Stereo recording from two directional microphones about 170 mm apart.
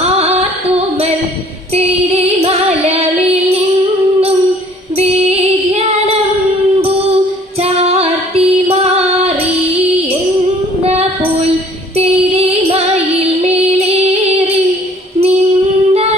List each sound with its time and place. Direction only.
0.2 s music: 40° right (ahead or behind)
4.9 s female singing: 35° right (ahead or behind)
7.6 s music: 35° right (ahead or behind)
10.8 s music: 40° right (ahead or behind)
15.9 s child singing: 35° right (ahead or behind)